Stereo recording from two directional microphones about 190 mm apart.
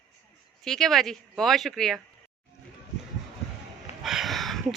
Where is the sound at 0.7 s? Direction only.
Centre (ahead or behind).